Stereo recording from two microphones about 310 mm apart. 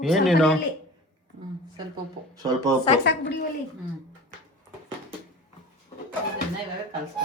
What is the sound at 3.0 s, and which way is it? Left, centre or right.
Speech, left.